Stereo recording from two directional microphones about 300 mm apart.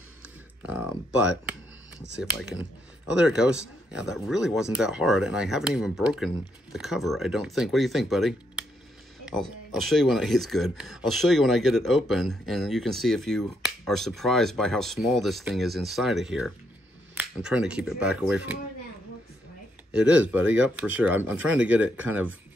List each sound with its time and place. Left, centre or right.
0.6 s speech: centre
19.9 s speech: centre